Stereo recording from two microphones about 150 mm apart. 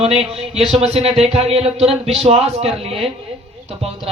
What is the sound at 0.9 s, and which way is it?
Speech, 45° right (ahead or behind).